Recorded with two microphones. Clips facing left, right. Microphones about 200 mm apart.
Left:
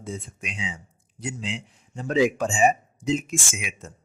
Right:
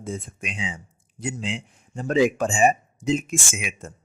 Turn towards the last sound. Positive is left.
turn(degrees=-50)  # may be behind; listen again after turning